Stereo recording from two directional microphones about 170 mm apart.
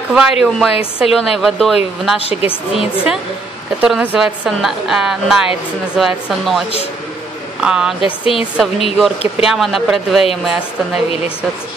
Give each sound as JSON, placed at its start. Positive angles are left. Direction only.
{"t": 0.1, "sound": "a woman's voice", "side_deg": -5}
{"t": 2.1, "sound": "speech", "side_deg": 35}
{"t": 2.7, "sound": "a woman's voice", "side_deg": -5}
{"t": 7.6, "sound": "a woman's voice", "side_deg": -5}